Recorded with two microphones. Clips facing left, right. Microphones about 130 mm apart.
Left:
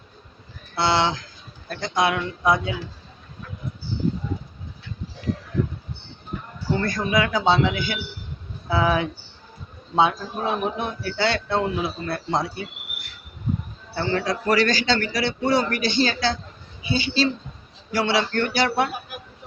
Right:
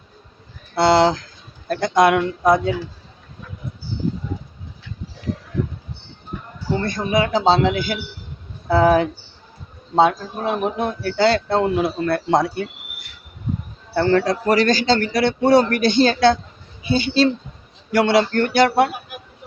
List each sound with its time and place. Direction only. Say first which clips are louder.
0.9 s a man's voice: right 7 dB; 40° right (ahead or behind)
6.7 s speech: right 3 dB; 25° right (ahead or behind)
11.7 s speech: right 7 dB; 60° right (ahead or behind)
13.9 s a man's voice: right 7 dB; 55° right (ahead or behind)